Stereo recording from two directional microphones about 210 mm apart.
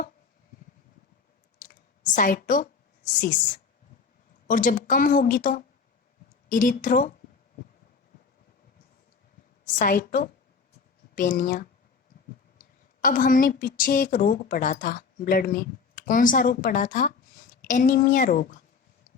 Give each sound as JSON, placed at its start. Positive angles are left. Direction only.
{"t": 2.1, "sound": "a woman's voice", "side_deg": 40}
{"t": 4.4, "sound": "a woman's voice", "side_deg": 40}
{"t": 9.6, "sound": "a woman's voice", "side_deg": 40}